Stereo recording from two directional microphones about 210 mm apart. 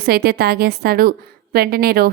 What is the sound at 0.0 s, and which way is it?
A woman's voice, 45° right (ahead or behind).